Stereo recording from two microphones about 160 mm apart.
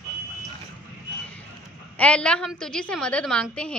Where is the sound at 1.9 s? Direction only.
5° left (ahead or behind).